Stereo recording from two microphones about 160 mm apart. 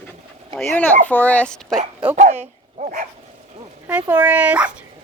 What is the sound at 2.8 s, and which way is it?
Dog, 55° right (ahead or behind).